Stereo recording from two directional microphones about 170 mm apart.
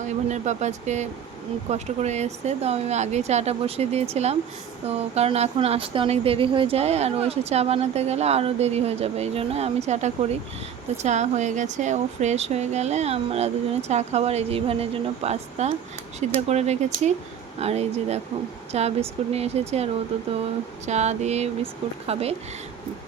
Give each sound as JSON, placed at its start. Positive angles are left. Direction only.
{"t": 0.0, "sound": "speech", "side_deg": -45}